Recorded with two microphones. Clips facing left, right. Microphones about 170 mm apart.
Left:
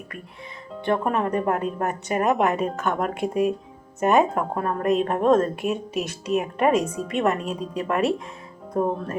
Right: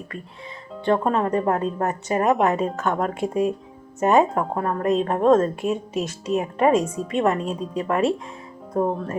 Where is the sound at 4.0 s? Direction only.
20° right (ahead or behind).